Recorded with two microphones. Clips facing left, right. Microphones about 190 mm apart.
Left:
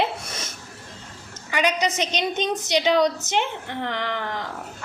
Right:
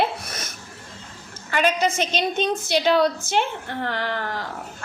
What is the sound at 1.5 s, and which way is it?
A woman's voice, 15° left (ahead or behind).